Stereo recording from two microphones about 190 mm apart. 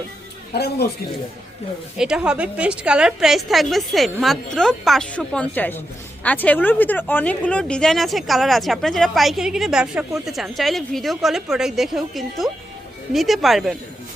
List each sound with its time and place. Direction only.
0.5 s speech: 55° left (ahead or behind)
2.0 s speech: 5° right (ahead or behind)